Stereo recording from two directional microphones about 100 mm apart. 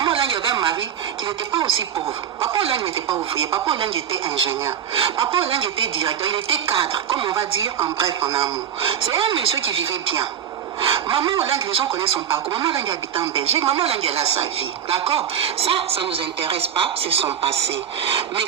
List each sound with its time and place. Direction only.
0.0 s a sound: 55° right (ahead or behind)
1.5 s speech: 55° right (ahead or behind)
2.0 s speech: 30° right (ahead or behind)
2.6 s a woman's voice: 70° right (ahead or behind)
8.0 s speech: 30° right (ahead or behind)
8.4 s speech: 65° right (ahead or behind)
13.7 s a woman's voice: 80° right
14.8 s a woman's voice: 75° right (ahead or behind)